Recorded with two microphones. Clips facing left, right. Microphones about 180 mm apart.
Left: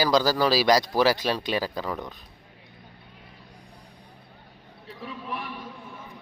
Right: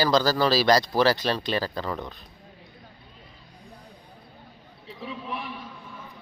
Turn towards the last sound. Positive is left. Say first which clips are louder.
# right 1 dB
turn(degrees=5)  # may be behind; listen again after turning